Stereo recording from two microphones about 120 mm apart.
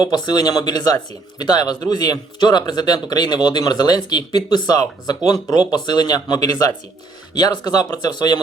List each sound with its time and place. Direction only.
0.0 s speech: 35° left (ahead or behind)